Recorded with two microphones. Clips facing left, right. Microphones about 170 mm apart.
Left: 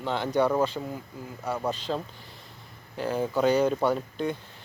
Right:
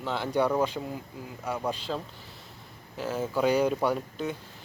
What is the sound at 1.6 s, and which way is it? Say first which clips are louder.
Speech: left 1 dB; 10° right (ahead or behind).